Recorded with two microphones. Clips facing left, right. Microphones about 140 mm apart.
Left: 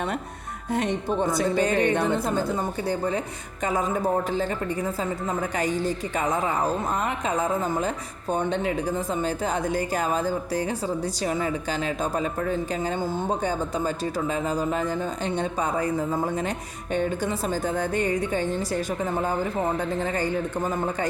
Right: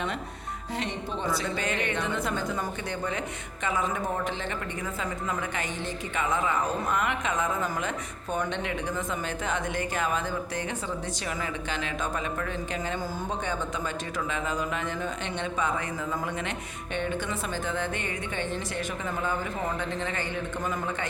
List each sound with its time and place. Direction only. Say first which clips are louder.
0.7 s speech: left 8 dB; 50° left (ahead or behind)